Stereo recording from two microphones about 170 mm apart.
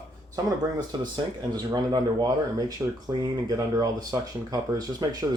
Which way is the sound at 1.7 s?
25° right (ahead or behind).